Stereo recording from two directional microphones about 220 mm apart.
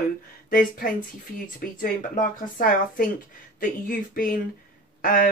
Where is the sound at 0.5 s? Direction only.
40° left (ahead or behind).